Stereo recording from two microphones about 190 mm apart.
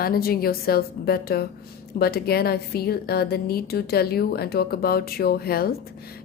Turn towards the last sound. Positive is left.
turn(degrees=55)  # may be behind; listen again after turning